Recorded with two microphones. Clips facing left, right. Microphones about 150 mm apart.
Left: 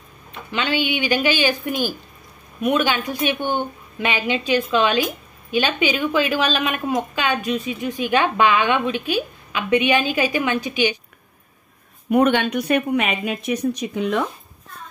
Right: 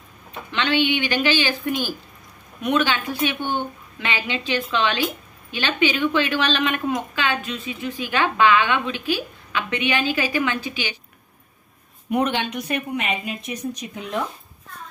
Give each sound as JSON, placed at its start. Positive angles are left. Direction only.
{"t": 0.5, "sound": "a woman's voice", "side_deg": 10}
{"t": 2.6, "sound": "a woman's voice", "side_deg": 10}
{"t": 12.1, "sound": "speech", "side_deg": 55}